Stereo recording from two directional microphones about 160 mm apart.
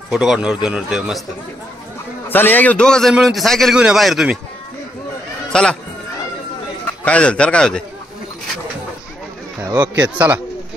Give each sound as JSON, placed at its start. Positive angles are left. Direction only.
{"t": 0.1, "sound": "a man's voice", "side_deg": -5}
{"t": 2.2, "sound": "a man's voice", "side_deg": 15}
{"t": 5.5, "sound": "speech", "side_deg": 5}
{"t": 7.1, "sound": "a man's voice", "side_deg": 5}
{"t": 9.7, "sound": "a man's voice", "side_deg": -25}
{"t": 10.0, "sound": "speech", "side_deg": -10}